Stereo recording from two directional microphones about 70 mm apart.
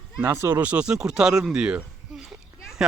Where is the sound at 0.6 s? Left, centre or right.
Centre.